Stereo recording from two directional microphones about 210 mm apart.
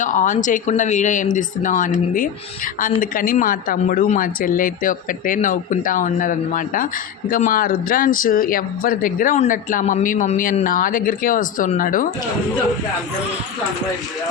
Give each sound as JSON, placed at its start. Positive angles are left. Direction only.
{"t": 0.0, "sound": "speech", "side_deg": 40}